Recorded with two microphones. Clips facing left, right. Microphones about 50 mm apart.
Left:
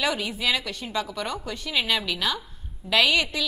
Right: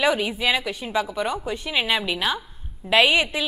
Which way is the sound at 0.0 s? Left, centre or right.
Centre.